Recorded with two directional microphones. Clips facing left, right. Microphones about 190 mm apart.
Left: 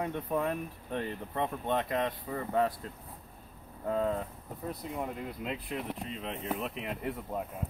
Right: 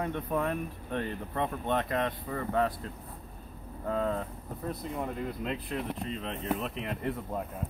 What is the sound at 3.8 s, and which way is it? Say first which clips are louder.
Speech: even; 15° left (ahead or behind).